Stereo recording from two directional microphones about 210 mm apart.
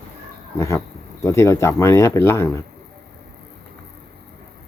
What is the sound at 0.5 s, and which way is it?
Speech, 15° left (ahead or behind).